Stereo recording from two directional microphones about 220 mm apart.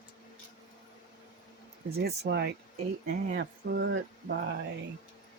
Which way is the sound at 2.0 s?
50° right (ahead or behind).